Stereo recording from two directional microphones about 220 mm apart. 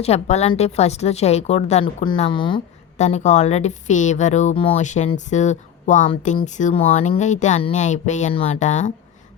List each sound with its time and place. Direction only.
0.0 s a woman's voice: 30° left (ahead or behind)